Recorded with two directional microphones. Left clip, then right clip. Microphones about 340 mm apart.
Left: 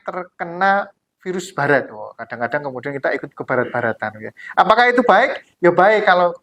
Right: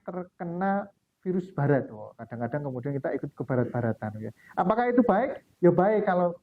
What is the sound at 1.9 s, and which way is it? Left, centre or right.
Speech, centre.